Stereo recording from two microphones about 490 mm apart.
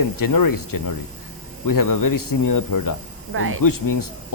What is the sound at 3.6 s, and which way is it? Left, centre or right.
Speech, left.